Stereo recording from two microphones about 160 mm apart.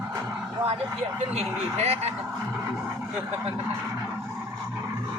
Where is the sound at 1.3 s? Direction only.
45° right (ahead or behind).